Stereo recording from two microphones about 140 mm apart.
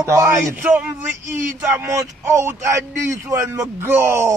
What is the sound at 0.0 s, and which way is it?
Speech, 20° right (ahead or behind).